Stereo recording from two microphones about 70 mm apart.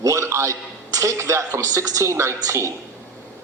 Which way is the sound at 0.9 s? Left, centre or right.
Right.